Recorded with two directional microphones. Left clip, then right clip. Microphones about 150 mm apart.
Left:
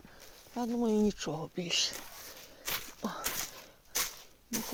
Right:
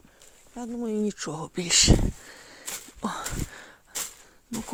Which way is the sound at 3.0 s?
50° right (ahead or behind).